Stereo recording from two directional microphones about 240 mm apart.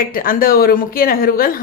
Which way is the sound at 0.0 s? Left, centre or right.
Left.